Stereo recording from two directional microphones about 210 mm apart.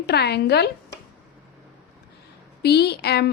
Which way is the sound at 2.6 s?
50° left (ahead or behind).